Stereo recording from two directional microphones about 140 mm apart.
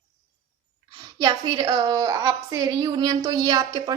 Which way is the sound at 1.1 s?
30° right (ahead or behind).